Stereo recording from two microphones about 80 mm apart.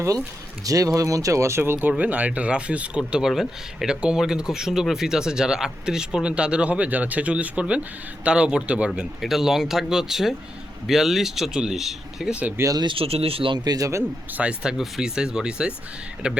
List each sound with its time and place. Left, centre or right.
0.6 s speech: right
1.9 s speech: centre
9.2 s speech: centre
12.7 s speech: right
13.7 s a man's voice: right
14.3 s speech: centre